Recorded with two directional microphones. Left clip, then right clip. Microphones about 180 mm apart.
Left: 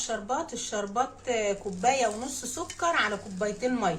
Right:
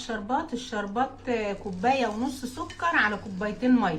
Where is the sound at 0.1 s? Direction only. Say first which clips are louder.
Right 4 dB; 60° left (ahead or behind).